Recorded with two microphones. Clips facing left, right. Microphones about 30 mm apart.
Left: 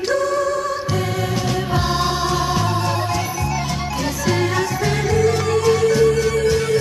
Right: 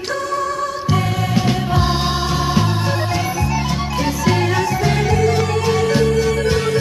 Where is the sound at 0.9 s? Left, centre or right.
Centre.